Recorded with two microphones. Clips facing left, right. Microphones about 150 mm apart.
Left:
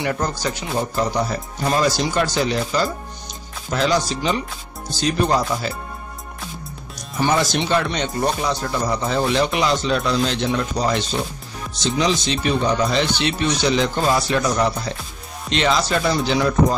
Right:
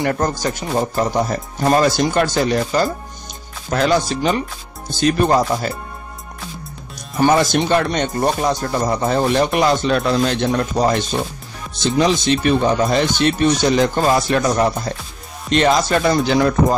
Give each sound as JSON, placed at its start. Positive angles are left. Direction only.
{"t": 0.0, "sound": "speech", "side_deg": -45}
{"t": 7.0, "sound": "speech", "side_deg": -50}